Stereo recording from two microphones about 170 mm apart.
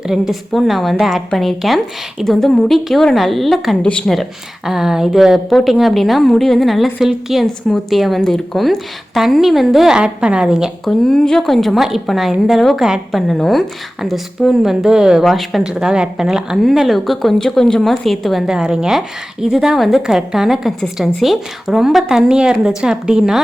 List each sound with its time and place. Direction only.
0.1 s a woman's voice: centre (ahead or behind)